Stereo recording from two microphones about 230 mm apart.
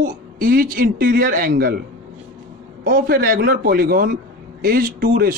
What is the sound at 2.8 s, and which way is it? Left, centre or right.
A man's voice, right.